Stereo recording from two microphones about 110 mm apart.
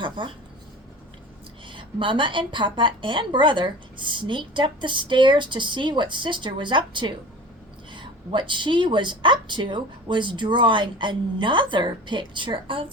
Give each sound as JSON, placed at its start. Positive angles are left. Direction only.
{"t": 0.2, "sound": "a woman's voice", "side_deg": -50}
{"t": 1.6, "sound": "a woman's voice", "side_deg": -50}